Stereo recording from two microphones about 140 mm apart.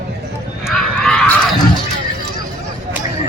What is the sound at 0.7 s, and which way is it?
Horse, 5° left (ahead or behind).